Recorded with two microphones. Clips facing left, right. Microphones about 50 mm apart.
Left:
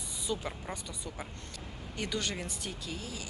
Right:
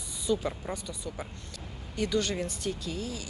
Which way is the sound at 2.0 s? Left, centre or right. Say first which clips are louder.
Right 7 dB; centre.